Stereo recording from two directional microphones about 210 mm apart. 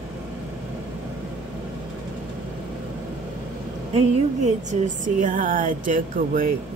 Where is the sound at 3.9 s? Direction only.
30° right (ahead or behind).